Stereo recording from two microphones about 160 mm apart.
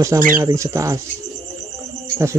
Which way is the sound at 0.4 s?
20° right (ahead or behind).